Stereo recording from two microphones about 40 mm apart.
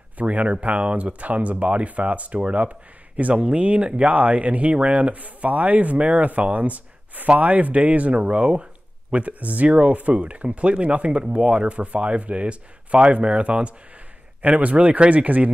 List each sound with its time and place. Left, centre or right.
0.2 s speech: right